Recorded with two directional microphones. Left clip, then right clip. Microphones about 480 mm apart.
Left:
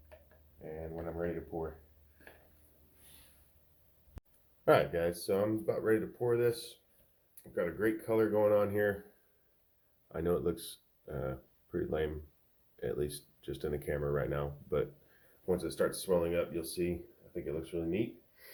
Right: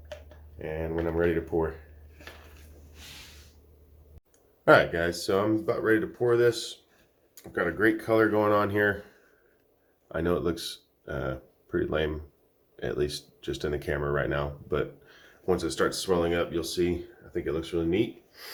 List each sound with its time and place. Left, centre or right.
1.5 s speech: centre
4.6 s speech: centre
10.1 s speech: centre